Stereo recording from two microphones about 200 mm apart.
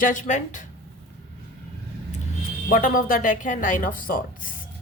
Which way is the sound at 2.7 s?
45° left (ahead or behind).